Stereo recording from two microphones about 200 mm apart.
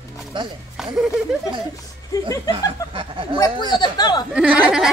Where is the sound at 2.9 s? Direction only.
25° right (ahead or behind).